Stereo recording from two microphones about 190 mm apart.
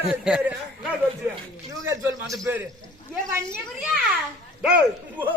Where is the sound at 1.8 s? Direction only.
15° right (ahead or behind).